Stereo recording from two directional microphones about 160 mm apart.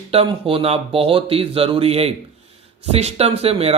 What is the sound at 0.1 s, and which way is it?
Speech, 35° right (ahead or behind).